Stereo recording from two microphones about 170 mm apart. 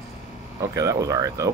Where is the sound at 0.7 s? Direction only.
20° right (ahead or behind).